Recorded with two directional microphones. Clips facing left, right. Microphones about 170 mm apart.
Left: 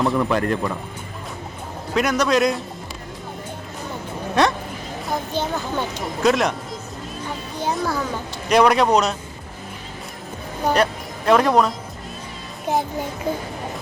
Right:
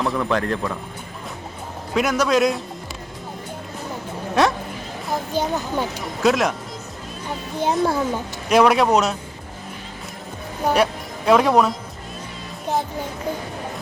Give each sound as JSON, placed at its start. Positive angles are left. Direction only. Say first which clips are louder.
{"t": 0.0, "sound": "a man's voice", "louder": "left 2 dB", "side_deg": 5}
{"t": 1.9, "sound": "a man's voice", "louder": "even", "side_deg": -5}
{"t": 4.4, "sound": "a man's voice", "louder": "even", "side_deg": -5}
{"t": 7.6, "sound": "speech", "louder": "right 4 dB", "side_deg": -25}
{"t": 8.4, "sound": "a man's voice", "louder": "even", "side_deg": -5}
{"t": 11.3, "sound": "a man's voice", "louder": "right 1 dB", "side_deg": 0}